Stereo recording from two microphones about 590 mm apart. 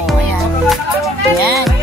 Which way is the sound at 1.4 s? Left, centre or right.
Right.